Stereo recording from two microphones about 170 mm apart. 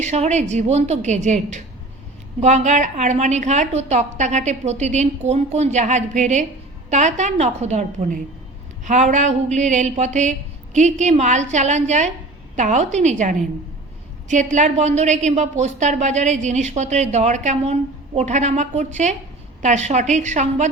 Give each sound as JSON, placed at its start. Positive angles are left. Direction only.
{"t": 0.0, "sound": "a woman's voice", "side_deg": -40}